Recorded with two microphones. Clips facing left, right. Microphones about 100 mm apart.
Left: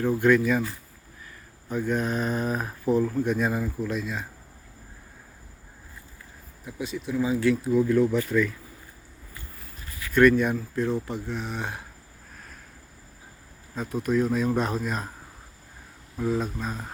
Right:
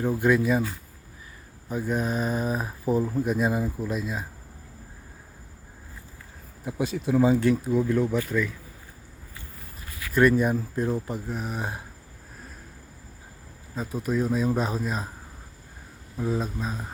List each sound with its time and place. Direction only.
0.0 s speech: 10° right (ahead or behind)
1.7 s speech: 10° right (ahead or behind)
6.7 s speech: 60° right (ahead or behind)
7.2 s speech: 50° right (ahead or behind)
7.7 s speech: 20° right (ahead or behind)
10.4 s speech: 15° right (ahead or behind)
13.7 s speech: 5° right (ahead or behind)
16.1 s speech: centre (ahead or behind)